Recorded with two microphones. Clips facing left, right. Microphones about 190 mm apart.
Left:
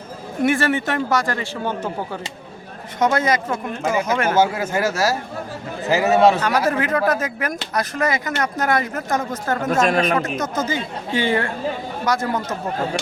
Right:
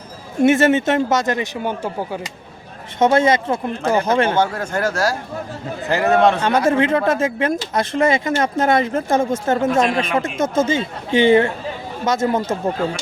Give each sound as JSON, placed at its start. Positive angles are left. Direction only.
{"t": 0.4, "sound": "speech", "side_deg": -25}
{"t": 3.0, "sound": "speech", "side_deg": -25}
{"t": 4.4, "sound": "a man's voice", "side_deg": 5}
{"t": 6.7, "sound": "speech", "side_deg": -25}